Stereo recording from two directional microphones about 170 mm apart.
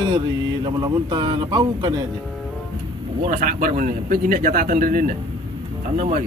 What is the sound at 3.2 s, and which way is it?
A man's voice, 50° right (ahead or behind).